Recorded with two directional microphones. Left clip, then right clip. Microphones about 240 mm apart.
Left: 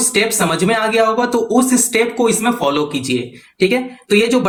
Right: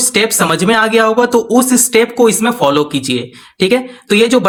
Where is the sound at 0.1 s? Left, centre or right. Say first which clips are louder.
Right 4 dB; right.